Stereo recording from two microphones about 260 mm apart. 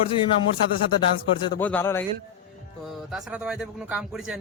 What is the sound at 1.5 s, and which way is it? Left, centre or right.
Speech, centre.